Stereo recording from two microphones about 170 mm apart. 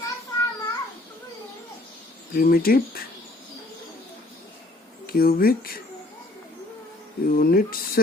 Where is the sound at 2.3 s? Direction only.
60° left (ahead or behind).